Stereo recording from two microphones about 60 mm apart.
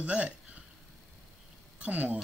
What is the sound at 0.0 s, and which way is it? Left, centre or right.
Speech, right.